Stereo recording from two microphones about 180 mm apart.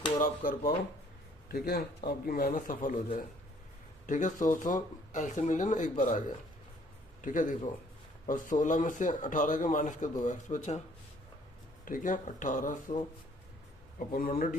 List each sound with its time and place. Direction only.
0.2 s speech: 50° left (ahead or behind)
4.0 s speech: 45° left (ahead or behind)
11.9 s speech: 45° left (ahead or behind)
14.1 s speech: 50° left (ahead or behind)